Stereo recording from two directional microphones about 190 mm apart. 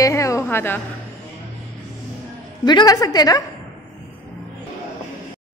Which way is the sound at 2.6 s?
20° left (ahead or behind).